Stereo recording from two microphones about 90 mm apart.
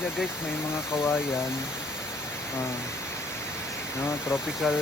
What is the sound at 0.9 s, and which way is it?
Speech, 25° left (ahead or behind).